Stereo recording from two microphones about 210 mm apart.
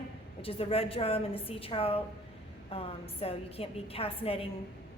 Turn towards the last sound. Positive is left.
turn(degrees=25)  # may be behind; listen again after turning